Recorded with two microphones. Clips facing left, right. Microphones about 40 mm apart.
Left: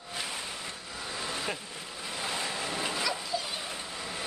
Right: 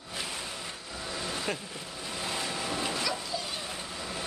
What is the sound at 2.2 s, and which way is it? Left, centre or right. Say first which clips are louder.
Vehicle: even; centre.